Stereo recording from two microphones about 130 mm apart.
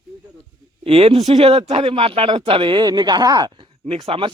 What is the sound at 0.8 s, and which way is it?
Speech, 50° right (ahead or behind).